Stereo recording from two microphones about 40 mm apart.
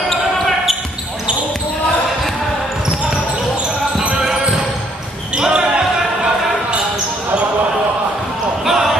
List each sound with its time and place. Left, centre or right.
5.3 s basketball bounce: centre
8.6 s basketball bounce: centre